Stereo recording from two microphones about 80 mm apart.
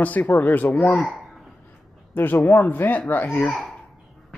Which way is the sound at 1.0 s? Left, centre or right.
Centre.